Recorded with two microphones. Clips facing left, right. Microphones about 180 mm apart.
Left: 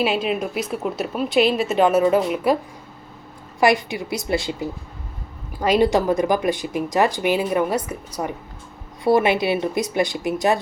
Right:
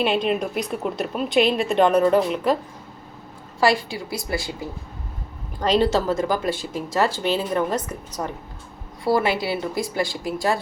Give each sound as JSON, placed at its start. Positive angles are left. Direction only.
{"t": 0.0, "sound": "a woman's voice", "side_deg": 5}
{"t": 3.6, "sound": "speech", "side_deg": 20}
{"t": 5.5, "sound": "speech", "side_deg": 10}
{"t": 9.0, "sound": "speech", "side_deg": 20}